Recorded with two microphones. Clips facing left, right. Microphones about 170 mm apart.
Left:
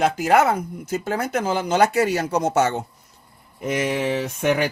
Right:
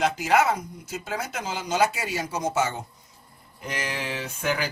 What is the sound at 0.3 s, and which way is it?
Speech, 55° left (ahead or behind).